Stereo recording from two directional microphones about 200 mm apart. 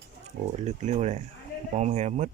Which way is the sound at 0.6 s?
35° right (ahead or behind).